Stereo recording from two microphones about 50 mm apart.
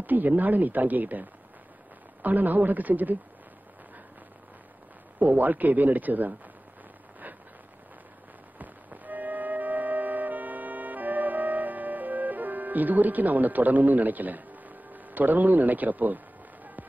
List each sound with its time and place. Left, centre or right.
0.0 s speech: right
2.2 s speech: right
5.2 s speech: right
8.5 s music: right